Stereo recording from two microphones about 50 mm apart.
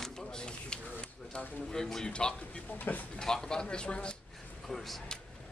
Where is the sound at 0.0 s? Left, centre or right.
Centre.